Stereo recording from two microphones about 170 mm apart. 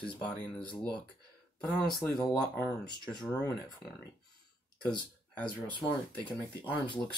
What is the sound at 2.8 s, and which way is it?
Speech, 25° left (ahead or behind).